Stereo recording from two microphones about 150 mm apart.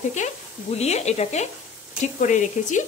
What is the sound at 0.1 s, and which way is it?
Speech, 50° left (ahead or behind).